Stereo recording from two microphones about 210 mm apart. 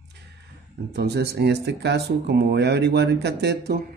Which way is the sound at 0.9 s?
50° right (ahead or behind).